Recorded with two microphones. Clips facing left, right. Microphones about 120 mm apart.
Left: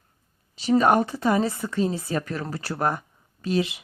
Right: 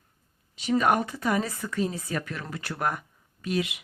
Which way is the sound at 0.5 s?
35° left (ahead or behind).